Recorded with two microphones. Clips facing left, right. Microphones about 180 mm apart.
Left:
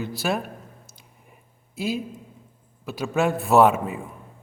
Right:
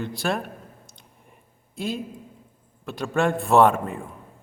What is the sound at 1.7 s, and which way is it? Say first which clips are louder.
Speech: left 2 dB; 5° left (ahead or behind).